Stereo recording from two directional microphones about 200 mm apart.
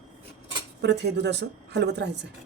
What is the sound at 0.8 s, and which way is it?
Speech, 60° right (ahead or behind).